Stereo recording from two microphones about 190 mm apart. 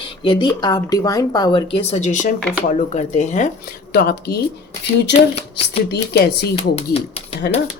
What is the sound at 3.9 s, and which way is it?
Speech, 60° left (ahead or behind).